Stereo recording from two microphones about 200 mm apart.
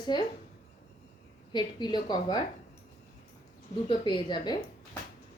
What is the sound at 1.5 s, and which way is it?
Speech, 20° left (ahead or behind).